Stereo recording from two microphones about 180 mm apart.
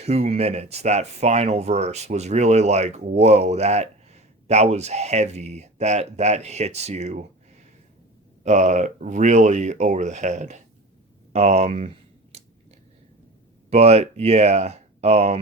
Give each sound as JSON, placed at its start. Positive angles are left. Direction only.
{"t": 0.0, "sound": "speech", "side_deg": -35}
{"t": 8.4, "sound": "speech", "side_deg": -40}
{"t": 11.3, "sound": "a sound", "side_deg": -35}
{"t": 13.7, "sound": "speech", "side_deg": -35}